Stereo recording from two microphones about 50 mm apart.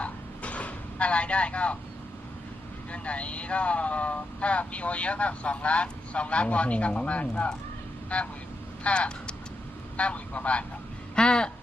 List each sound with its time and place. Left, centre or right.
0.0 s vehicle: left
2.9 s speech: left
11.1 s a sound: centre